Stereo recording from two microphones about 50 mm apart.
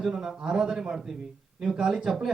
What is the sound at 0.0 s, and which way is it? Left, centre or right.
Speech, centre.